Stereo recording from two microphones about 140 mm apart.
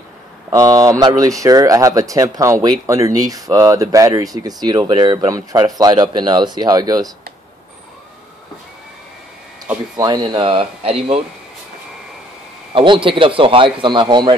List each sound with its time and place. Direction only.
0.5 s speech: 25° right (ahead or behind)
9.9 s a man's voice: 30° right (ahead or behind); by 11.2 s 45° right (ahead or behind)
12.7 s a man's voice: 35° right (ahead or behind)